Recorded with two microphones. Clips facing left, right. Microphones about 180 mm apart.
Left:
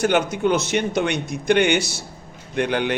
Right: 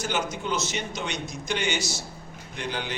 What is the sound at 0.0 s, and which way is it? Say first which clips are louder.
A man's voice: left 10 dB; 60° left (ahead or behind).